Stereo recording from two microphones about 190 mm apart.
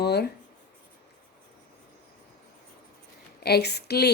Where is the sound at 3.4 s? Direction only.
55° left (ahead or behind).